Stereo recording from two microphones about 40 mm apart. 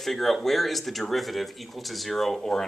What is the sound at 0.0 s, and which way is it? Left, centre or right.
Speech, centre.